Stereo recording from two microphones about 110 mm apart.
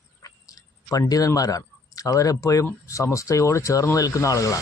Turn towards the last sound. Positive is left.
turn(degrees=30)  # may be behind; listen again after turning